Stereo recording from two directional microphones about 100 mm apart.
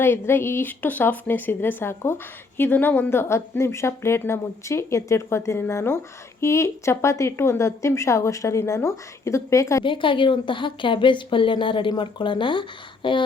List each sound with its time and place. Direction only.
0.0 s a woman's voice: 25° left (ahead or behind)
9.8 s speech: 55° left (ahead or behind)